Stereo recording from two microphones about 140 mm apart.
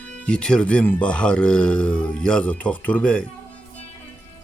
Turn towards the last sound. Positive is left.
turn(degrees=10)  # may be behind; listen again after turning